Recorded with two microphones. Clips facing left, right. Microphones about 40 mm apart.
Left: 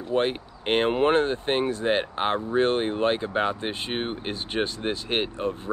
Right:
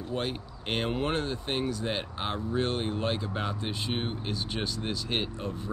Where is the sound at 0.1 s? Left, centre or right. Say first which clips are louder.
Left 9 dB; left.